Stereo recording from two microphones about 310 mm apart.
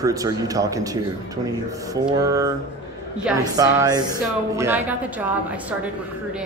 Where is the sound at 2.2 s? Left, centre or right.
Centre.